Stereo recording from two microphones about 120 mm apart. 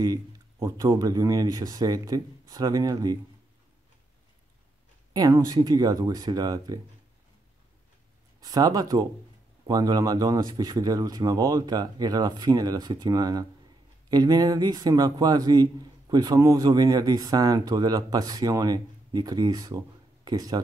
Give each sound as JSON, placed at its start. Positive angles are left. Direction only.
{"t": 0.0, "sound": "a man's voice", "side_deg": -30}
{"t": 5.1, "sound": "a man's voice", "side_deg": -30}
{"t": 8.4, "sound": "a man's voice", "side_deg": -35}